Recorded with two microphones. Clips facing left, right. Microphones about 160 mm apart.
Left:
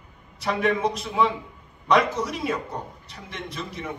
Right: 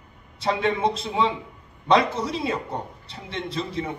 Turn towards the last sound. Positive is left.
turn(degrees=-30)  # may be behind; listen again after turning